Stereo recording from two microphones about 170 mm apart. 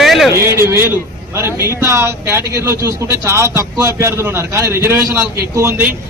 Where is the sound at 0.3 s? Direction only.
15° right (ahead or behind).